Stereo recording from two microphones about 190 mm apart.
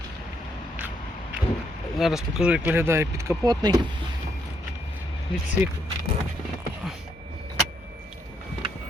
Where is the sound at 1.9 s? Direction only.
Centre (ahead or behind); by 3.8 s 20° right (ahead or behind).